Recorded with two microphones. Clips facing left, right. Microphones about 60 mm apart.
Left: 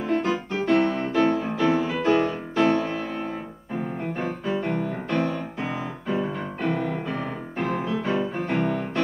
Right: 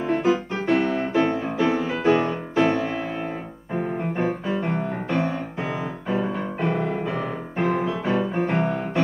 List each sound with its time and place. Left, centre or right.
0.0 s music: centre
1.4 s music: centre
4.5 s music: centre
7.5 s music: centre